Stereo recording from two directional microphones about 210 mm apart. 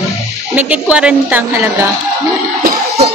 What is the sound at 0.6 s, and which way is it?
Speech, 5° right (ahead or behind).